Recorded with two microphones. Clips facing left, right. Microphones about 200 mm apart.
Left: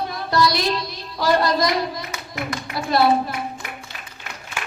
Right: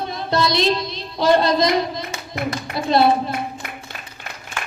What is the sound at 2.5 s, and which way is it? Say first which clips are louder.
Speech: right 3 dB; 25° right (ahead or behind).